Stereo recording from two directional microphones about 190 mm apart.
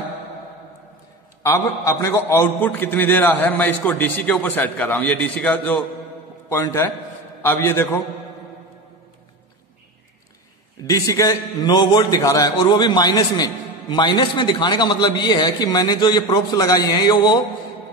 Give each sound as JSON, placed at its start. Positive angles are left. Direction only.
{"t": 1.4, "sound": "a man's voice", "side_deg": 15}
{"t": 10.9, "sound": "a man's voice", "side_deg": 15}